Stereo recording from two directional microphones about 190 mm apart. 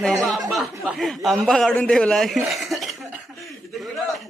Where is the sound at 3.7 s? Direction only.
Centre (ahead or behind).